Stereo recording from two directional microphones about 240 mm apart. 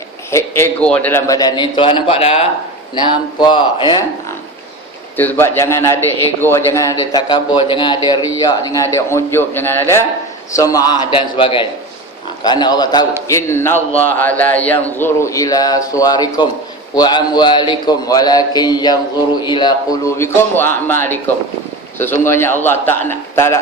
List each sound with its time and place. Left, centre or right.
0.3 s a man's voice: centre
5.1 s a man's voice: centre